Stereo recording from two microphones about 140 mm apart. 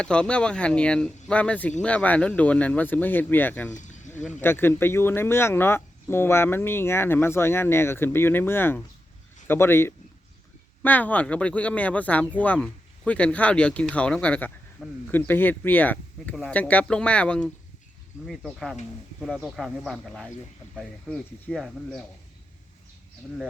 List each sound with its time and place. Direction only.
0.0 s speech: 5° left (ahead or behind)
3.7 s a sound: 60° left (ahead or behind)
4.1 s speech: 15° left (ahead or behind)